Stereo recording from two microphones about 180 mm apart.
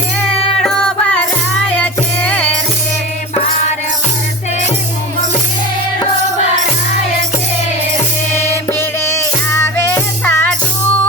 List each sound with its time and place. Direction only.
1.7 s music: 5° left (ahead or behind)
8.8 s music: 15° left (ahead or behind)